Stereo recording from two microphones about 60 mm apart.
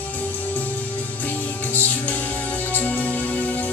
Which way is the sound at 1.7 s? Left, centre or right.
Left.